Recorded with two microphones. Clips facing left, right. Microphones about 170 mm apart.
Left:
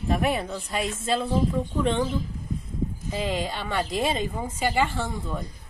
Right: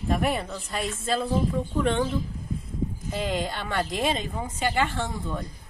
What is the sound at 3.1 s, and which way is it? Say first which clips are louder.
Speech: even; centre (ahead or behind).